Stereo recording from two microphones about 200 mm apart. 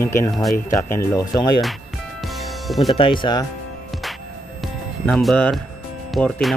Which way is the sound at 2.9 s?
25° left (ahead or behind).